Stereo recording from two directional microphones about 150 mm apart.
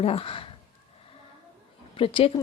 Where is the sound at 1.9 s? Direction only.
40° left (ahead or behind).